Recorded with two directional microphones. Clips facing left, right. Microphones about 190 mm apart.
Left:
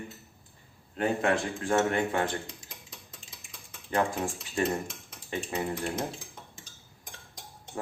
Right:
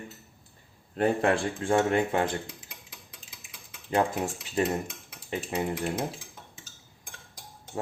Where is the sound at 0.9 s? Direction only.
40° right (ahead or behind).